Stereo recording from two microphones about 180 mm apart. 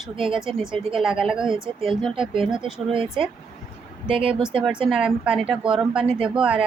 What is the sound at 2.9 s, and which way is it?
Speech, 30° right (ahead or behind).